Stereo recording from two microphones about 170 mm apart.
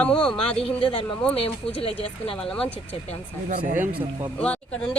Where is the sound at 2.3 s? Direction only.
5° left (ahead or behind).